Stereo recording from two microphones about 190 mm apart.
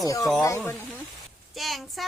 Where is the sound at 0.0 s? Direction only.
20° left (ahead or behind).